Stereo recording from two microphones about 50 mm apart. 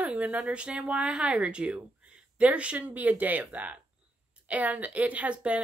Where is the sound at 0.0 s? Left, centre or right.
Right.